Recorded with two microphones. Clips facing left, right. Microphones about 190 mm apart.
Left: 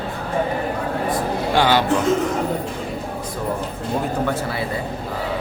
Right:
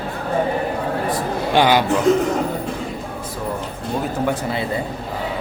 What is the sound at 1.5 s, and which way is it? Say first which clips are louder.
Speech: right 2 dB; 15° right (ahead or behind).